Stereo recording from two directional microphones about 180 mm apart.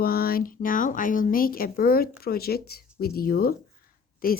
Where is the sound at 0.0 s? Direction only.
55° left (ahead or behind).